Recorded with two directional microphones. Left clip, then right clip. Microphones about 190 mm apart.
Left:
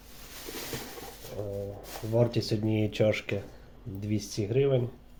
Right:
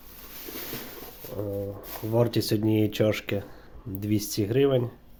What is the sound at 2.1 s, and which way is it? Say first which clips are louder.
Speech: right 3 dB; 35° right (ahead or behind).